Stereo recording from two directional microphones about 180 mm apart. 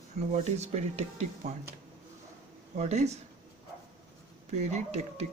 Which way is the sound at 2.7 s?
40° right (ahead or behind).